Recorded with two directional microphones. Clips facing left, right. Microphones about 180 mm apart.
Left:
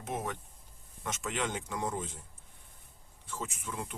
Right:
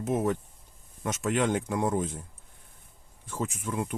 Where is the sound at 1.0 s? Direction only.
50° right (ahead or behind).